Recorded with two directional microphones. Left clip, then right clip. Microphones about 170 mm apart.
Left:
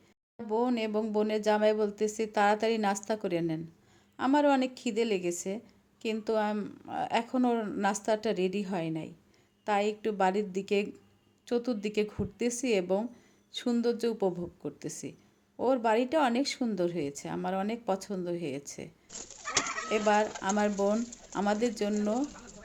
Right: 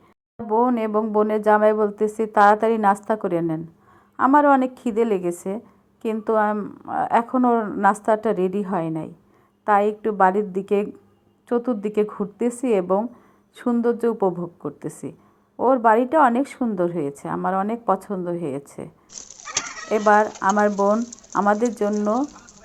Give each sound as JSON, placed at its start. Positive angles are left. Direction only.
{"t": 0.5, "sound": "a woman's voice", "side_deg": 10}
{"t": 19.9, "sound": "a woman's voice", "side_deg": 15}